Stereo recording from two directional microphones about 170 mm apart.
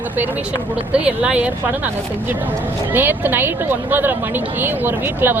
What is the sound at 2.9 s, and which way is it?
Speech, 10° right (ahead or behind).